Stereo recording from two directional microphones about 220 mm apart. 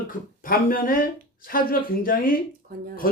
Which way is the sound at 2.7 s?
40° right (ahead or behind).